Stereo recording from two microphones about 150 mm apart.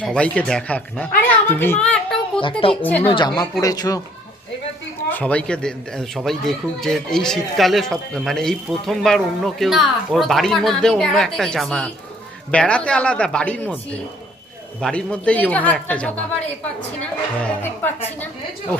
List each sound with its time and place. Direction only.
0.0 s a woman's voice: 5° left (ahead or behind)
2.4 s a woman's voice: 35° left (ahead or behind)
5.1 s speech: 10° left (ahead or behind)
14.8 s speech: 5° left (ahead or behind)
17.4 s speech: 15° left (ahead or behind)